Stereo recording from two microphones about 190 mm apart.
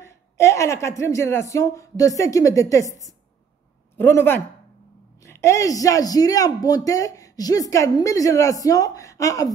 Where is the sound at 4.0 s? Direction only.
10° left (ahead or behind).